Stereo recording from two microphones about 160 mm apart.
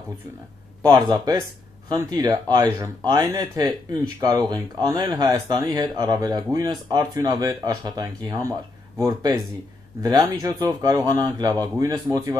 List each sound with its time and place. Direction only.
0.8 s speech: 25° right (ahead or behind)